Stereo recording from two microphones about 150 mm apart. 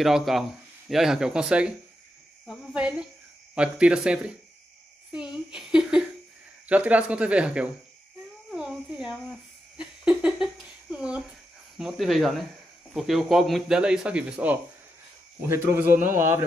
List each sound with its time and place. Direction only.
0.0 s speech: centre (ahead or behind)
8.5 s a sound: 5° right (ahead or behind)
11.8 s speech: centre (ahead or behind)
15.8 s speech: 70° right (ahead or behind)
16.1 s speech: 15° right (ahead or behind)